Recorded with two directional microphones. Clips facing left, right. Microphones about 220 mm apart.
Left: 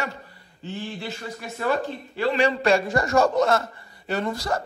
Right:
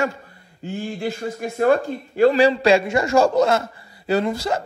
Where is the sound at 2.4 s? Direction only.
30° right (ahead or behind).